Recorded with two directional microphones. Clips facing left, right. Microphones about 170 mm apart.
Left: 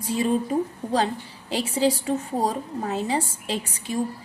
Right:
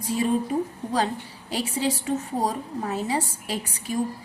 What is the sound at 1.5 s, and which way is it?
A woman's voice, 30° left (ahead or behind).